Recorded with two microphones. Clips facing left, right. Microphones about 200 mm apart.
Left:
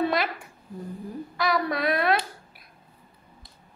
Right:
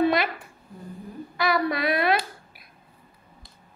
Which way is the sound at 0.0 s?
Centre (ahead or behind).